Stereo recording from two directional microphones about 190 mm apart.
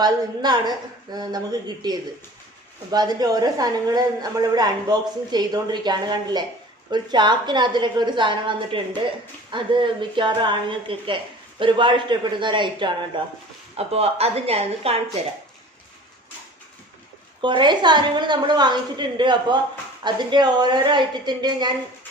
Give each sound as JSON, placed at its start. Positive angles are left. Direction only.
{"t": 0.0, "sound": "a woman's voice", "side_deg": -20}
{"t": 17.4, "sound": "a woman's voice", "side_deg": -25}